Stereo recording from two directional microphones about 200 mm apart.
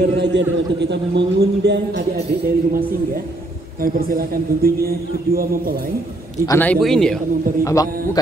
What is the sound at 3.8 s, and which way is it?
A man's voice, 45° right (ahead or behind).